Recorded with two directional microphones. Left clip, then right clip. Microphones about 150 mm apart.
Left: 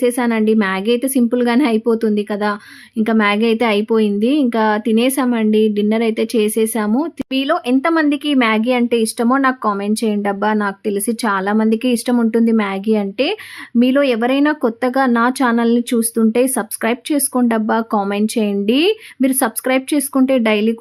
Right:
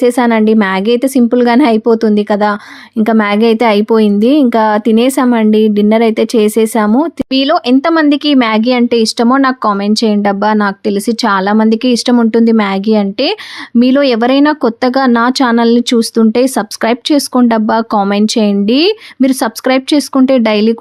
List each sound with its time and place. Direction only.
0.0 s a woman's voice: 35° right (ahead or behind)